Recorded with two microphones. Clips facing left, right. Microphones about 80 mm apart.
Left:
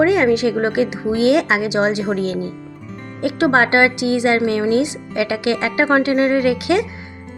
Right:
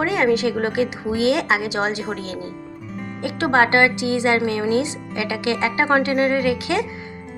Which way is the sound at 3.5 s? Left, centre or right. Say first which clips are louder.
Right 1 dB; centre.